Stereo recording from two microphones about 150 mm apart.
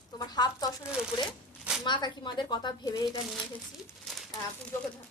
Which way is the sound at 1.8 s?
30° left (ahead or behind).